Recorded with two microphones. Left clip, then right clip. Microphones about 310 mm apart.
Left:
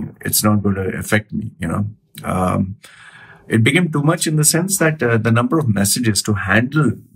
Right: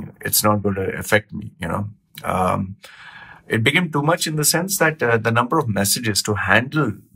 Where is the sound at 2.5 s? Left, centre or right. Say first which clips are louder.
Left 1 dB; right.